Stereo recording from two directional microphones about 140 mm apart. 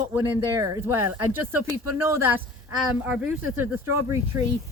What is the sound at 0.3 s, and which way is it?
A man's voice, 25° right (ahead or behind).